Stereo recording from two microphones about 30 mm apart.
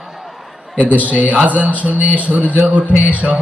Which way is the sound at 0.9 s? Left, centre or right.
Right.